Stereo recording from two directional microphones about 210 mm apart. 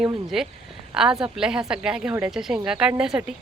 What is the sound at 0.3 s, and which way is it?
Speech, centre (ahead or behind).